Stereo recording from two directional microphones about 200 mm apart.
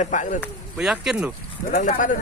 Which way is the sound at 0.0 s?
40° left (ahead or behind).